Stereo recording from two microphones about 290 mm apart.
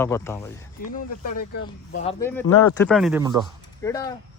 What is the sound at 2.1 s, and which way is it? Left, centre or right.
Speech, centre.